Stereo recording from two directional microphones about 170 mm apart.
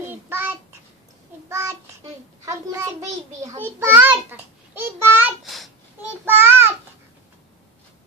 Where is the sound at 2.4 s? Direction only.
20° right (ahead or behind).